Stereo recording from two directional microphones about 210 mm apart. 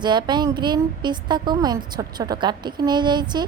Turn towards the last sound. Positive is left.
turn(degrees=-20)  # may be behind; listen again after turning